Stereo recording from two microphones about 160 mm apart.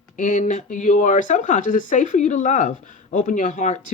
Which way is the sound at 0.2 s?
50° left (ahead or behind).